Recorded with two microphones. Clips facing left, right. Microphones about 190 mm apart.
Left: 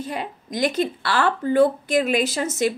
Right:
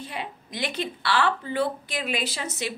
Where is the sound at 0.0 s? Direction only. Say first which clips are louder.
Left 6 dB; 45° left (ahead or behind).